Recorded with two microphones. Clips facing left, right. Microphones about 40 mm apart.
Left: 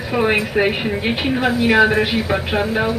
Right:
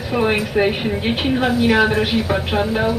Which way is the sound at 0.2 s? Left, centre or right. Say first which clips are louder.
Left 1 dB; left.